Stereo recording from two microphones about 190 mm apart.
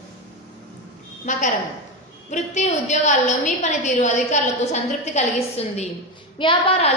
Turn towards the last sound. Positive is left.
turn(degrees=30)  # may be behind; listen again after turning